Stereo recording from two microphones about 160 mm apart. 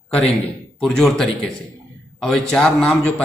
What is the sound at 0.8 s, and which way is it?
A man's voice, 5° left (ahead or behind).